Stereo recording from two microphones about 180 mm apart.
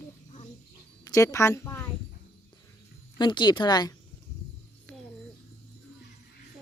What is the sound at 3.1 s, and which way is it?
Speech, 25° left (ahead or behind).